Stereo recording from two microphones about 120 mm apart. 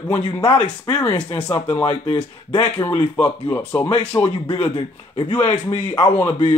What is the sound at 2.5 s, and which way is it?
Speech, 35° left (ahead or behind).